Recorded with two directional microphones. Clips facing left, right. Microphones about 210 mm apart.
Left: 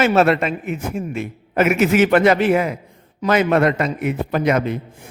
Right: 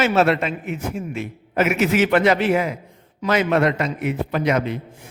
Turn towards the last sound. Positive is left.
turn(degrees=50)  # may be behind; listen again after turning